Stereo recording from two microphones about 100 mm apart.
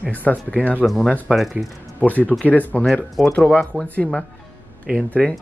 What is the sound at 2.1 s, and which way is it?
Speech, 15° left (ahead or behind).